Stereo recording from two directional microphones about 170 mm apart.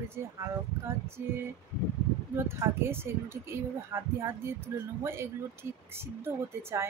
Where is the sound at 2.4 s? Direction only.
15° right (ahead or behind).